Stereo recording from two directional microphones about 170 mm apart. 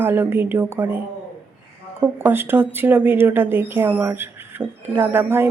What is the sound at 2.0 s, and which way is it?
Speech, 10° right (ahead or behind).